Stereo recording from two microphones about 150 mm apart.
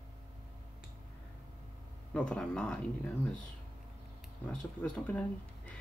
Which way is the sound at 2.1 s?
5° left (ahead or behind).